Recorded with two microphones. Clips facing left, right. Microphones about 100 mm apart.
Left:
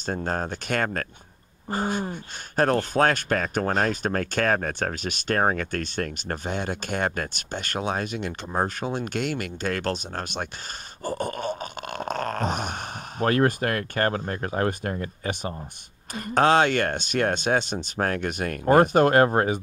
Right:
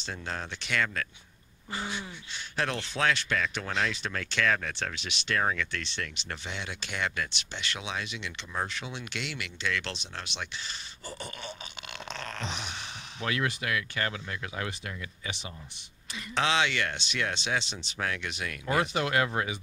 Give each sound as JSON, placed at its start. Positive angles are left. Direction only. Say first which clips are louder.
{"t": 0.0, "sound": "speech", "louder": "left 9 dB", "side_deg": 45}
{"t": 11.1, "sound": "a sound", "louder": "left 13 dB", "side_deg": 45}
{"t": 13.2, "sound": "speech", "louder": "left 10 dB", "side_deg": 45}